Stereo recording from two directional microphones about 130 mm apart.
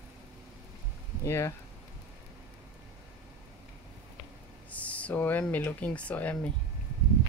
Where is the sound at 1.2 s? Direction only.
25° left (ahead or behind).